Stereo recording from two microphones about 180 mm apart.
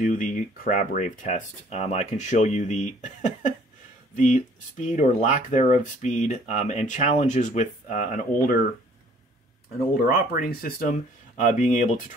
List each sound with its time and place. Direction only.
0.0 s speech: 45° left (ahead or behind)
4.9 s speech: 40° left (ahead or behind)
10.0 s speech: 50° left (ahead or behind)